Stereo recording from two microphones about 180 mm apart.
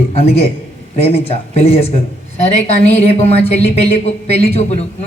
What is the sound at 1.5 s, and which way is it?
A man's voice, 35° left (ahead or behind).